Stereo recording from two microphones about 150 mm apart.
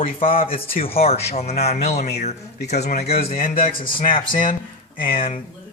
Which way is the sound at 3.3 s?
70° left (ahead or behind).